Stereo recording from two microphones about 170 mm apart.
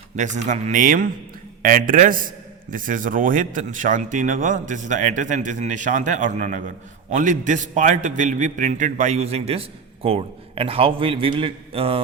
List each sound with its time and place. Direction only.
0.2 s a man's voice: 45° right (ahead or behind)